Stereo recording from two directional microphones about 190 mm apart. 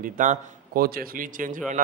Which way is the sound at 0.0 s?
45° right (ahead or behind).